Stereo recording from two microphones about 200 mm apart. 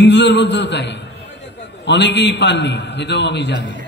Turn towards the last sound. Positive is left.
turn(degrees=60)  # may be behind; listen again after turning